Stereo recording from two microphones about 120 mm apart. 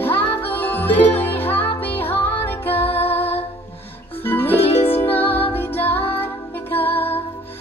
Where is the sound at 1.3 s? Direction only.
15° left (ahead or behind).